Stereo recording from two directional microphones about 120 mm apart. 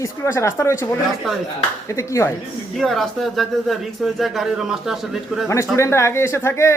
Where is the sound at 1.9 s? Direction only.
25° left (ahead or behind).